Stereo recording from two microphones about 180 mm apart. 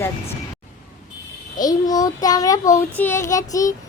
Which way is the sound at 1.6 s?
20° left (ahead or behind).